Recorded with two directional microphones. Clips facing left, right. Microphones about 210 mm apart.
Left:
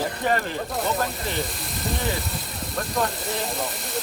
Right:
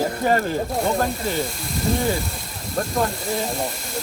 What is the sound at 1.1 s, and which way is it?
Speech, centre (ahead or behind).